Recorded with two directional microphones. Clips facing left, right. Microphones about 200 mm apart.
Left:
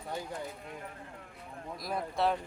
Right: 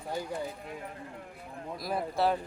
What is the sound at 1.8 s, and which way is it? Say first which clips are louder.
Speech: right 2 dB; 5° right (ahead or behind).